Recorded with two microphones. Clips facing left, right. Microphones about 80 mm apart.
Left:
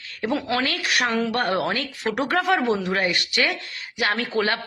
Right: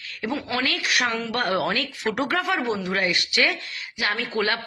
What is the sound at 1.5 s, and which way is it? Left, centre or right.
A woman's voice, left.